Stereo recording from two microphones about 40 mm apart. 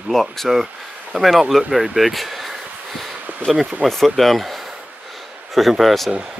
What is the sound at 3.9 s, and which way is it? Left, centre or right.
Speech, centre.